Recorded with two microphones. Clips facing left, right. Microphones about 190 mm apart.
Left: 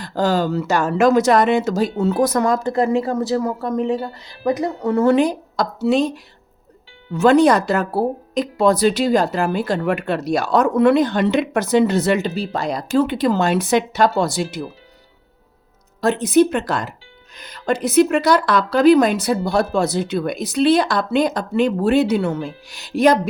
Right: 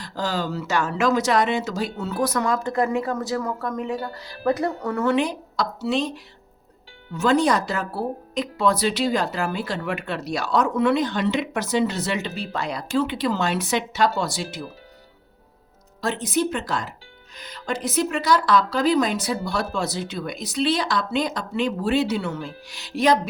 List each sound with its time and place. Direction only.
0.0 s speech: 50° left (ahead or behind); by 5.0 s 25° left (ahead or behind)
5.0 s speech: 40° left (ahead or behind)
7.2 s speech: 65° left (ahead or behind)
12.2 s a woman's voice: 40° left (ahead or behind); by 14.6 s 55° left (ahead or behind)
16.0 s speech: 60° left (ahead or behind)